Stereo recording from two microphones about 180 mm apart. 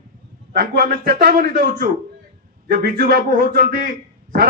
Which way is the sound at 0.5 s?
55° right (ahead or behind).